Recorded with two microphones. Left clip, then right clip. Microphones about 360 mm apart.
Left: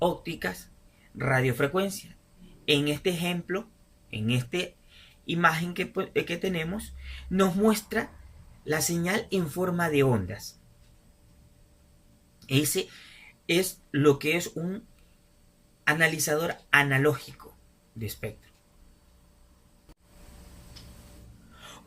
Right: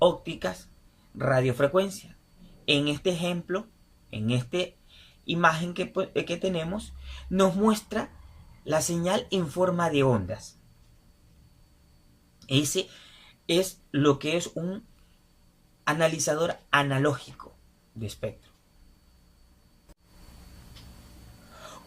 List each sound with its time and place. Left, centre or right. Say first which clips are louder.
0.0 s speech: right 4 dB; centre
12.5 s speech: right 1 dB; centre
15.8 s speech: left 1 dB; centre